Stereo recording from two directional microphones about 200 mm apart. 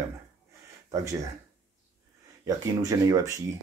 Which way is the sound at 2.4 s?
15° right (ahead or behind).